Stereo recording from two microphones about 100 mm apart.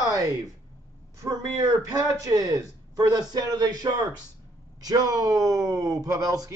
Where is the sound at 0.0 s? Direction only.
35° right (ahead or behind).